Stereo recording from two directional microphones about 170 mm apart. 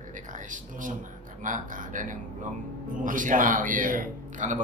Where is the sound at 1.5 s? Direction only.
50° right (ahead or behind).